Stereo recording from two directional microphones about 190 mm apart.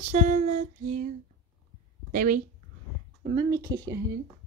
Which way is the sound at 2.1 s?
45° right (ahead or behind).